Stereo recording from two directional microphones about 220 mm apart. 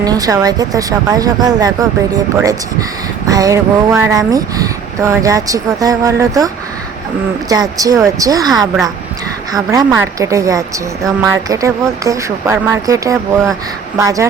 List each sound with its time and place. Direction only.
0.0 s speech: 15° right (ahead or behind)
7.5 s speech: 15° right (ahead or behind)